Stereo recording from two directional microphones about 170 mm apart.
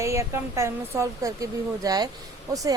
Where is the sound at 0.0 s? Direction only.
15° right (ahead or behind).